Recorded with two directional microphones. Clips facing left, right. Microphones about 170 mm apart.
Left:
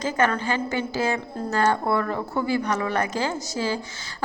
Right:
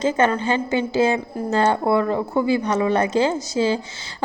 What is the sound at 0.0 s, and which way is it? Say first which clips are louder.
A woman's voice: right 4 dB; 25° right (ahead or behind).